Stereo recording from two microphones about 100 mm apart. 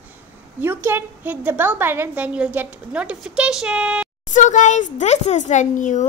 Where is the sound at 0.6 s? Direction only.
20° right (ahead or behind).